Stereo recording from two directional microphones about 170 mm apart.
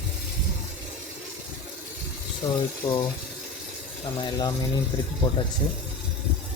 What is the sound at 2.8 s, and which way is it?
Speech, 25° left (ahead or behind).